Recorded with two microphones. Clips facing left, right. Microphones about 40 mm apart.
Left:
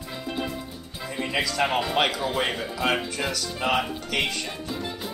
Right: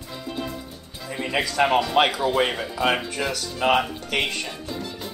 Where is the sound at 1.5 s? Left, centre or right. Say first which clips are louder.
Right 7 dB; centre.